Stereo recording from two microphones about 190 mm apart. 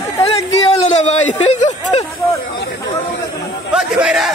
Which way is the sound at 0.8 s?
35° left (ahead or behind).